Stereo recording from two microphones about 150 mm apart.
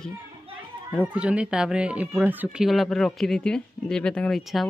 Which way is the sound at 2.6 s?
Centre (ahead or behind).